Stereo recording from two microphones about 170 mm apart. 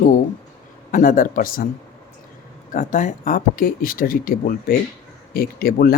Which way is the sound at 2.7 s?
50° left (ahead or behind).